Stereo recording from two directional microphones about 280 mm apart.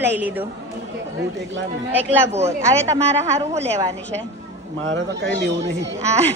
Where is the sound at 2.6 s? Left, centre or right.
Centre.